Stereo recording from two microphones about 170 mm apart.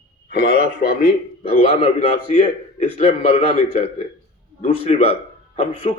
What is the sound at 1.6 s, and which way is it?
A man's voice, 35° left (ahead or behind).